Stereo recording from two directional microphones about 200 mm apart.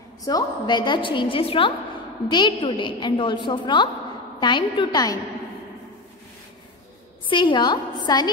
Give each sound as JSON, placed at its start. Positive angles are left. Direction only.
{"t": 0.2, "sound": "a woman's voice", "side_deg": 20}
{"t": 7.2, "sound": "a woman's voice", "side_deg": 25}